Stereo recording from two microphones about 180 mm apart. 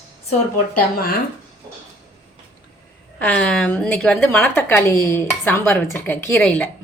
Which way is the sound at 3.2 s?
5° left (ahead or behind).